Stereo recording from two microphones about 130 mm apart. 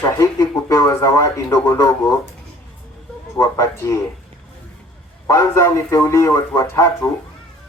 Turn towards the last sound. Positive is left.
turn(degrees=25)  # may be behind; listen again after turning